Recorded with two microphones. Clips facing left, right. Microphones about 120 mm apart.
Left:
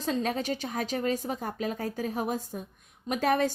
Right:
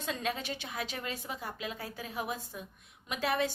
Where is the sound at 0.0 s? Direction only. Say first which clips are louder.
Left 6 dB; 40° left (ahead or behind).